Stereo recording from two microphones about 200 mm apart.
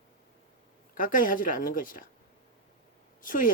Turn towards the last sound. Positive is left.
turn(degrees=45)  # may be behind; listen again after turning